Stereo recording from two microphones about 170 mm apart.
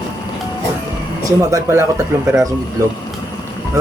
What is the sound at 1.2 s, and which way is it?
Speech, 20° right (ahead or behind).